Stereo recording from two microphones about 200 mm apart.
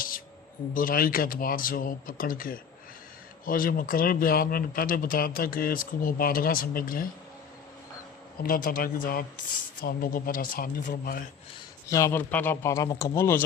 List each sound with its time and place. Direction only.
0.7 s speech: 45° left (ahead or behind)
8.4 s speech: 45° left (ahead or behind)
11.9 s speech: 15° left (ahead or behind)